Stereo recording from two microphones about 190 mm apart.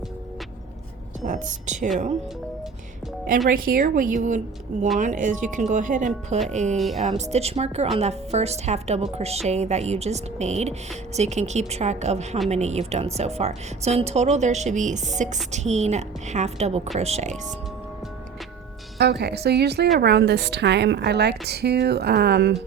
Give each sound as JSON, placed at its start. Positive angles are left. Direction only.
{"t": 1.2, "sound": "speech", "side_deg": -40}
{"t": 3.5, "sound": "a woman's voice", "side_deg": -50}
{"t": 6.7, "sound": "speech", "side_deg": 0}
{"t": 7.2, "sound": "speech", "side_deg": -35}
{"t": 18.9, "sound": "a woman's voice", "side_deg": -60}